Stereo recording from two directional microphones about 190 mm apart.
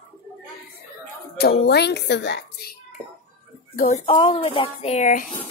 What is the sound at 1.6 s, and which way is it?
Speech, 60° left (ahead or behind).